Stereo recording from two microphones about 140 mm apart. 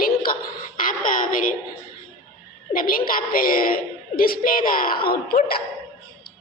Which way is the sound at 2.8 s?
90° left.